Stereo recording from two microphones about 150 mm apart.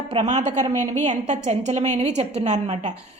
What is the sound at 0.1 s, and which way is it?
Speech, 50° right (ahead or behind).